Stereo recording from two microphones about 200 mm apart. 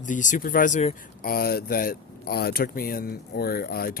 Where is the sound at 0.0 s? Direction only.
40° left (ahead or behind).